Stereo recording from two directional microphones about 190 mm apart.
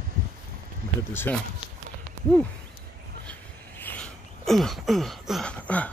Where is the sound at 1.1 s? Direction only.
10° left (ahead or behind).